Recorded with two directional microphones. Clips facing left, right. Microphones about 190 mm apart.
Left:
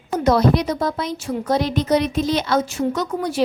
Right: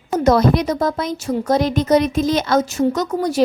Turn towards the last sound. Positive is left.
turn(degrees=-40)  # may be behind; listen again after turning